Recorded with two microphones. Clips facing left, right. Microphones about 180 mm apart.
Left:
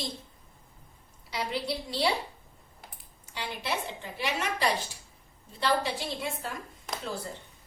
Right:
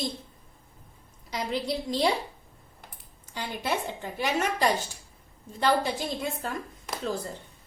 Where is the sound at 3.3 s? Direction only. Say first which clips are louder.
Right 3 dB; 45° right (ahead or behind).